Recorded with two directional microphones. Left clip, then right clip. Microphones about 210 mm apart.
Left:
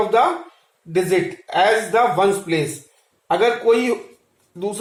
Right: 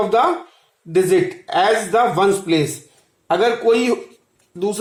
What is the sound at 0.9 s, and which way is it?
A man's voice, 55° right (ahead or behind).